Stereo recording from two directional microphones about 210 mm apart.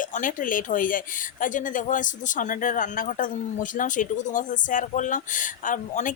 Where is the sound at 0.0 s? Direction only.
40° left (ahead or behind).